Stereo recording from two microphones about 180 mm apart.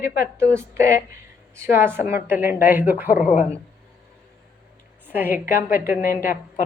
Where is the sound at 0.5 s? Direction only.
15° right (ahead or behind).